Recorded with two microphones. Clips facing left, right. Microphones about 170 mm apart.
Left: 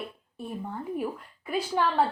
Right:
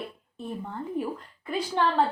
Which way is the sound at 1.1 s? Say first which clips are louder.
Even; 10° left (ahead or behind).